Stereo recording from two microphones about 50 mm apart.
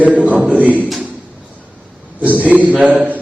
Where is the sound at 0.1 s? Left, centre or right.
Right.